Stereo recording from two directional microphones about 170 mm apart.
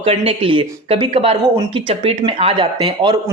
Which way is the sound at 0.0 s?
30° right (ahead or behind).